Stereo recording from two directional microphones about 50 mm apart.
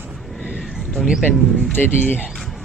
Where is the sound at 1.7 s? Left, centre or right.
Left.